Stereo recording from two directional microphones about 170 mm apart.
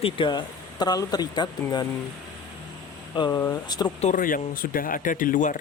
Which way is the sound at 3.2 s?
20° left (ahead or behind).